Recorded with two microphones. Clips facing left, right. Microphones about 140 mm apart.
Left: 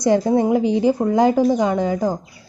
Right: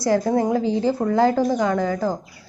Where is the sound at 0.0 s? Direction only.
20° left (ahead or behind).